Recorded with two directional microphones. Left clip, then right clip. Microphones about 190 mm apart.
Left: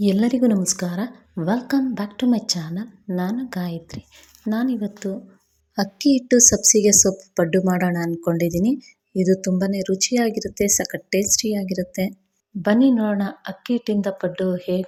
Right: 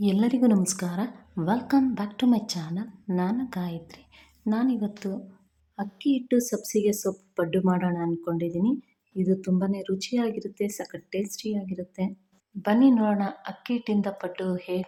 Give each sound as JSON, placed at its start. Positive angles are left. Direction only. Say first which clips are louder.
{"t": 0.0, "sound": "a woman's voice", "louder": "left 5 dB", "side_deg": 15}